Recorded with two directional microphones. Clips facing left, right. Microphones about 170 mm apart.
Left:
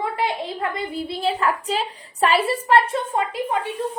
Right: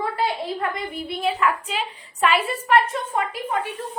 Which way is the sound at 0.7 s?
30° left (ahead or behind).